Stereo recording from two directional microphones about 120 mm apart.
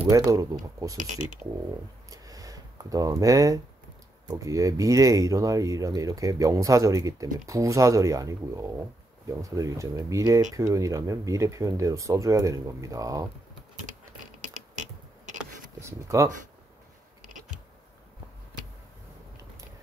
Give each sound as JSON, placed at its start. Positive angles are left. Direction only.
{"t": 0.1, "sound": "speech", "side_deg": -25}
{"t": 0.9, "sound": "speech", "side_deg": -90}
{"t": 2.0, "sound": "a sound", "side_deg": -30}
{"t": 4.3, "sound": "speech", "side_deg": -30}
{"t": 14.5, "sound": "a sound", "side_deg": -90}
{"t": 15.8, "sound": "speech", "side_deg": -25}